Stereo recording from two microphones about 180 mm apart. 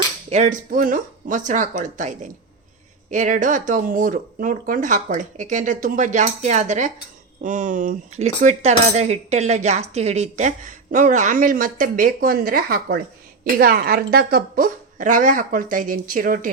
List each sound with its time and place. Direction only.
0.3 s speech: 40° right (ahead or behind)